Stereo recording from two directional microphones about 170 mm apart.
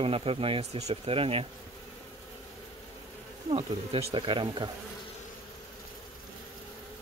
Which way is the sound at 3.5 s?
35° right (ahead or behind).